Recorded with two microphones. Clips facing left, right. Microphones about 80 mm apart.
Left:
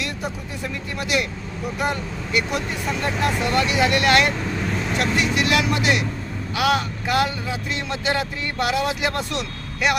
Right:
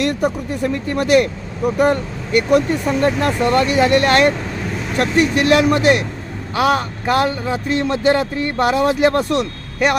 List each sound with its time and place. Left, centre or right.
0.0 s speech: right